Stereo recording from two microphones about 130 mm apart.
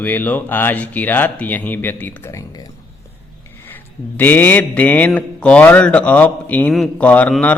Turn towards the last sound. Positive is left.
turn(degrees=10)  # may be behind; listen again after turning